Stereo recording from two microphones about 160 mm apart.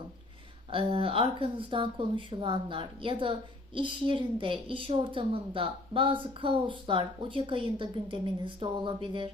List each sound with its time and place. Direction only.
0.7 s a woman's voice: 35° right (ahead or behind)